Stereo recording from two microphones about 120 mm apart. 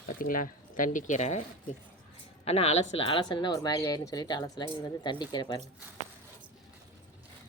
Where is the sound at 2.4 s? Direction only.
60° left (ahead or behind).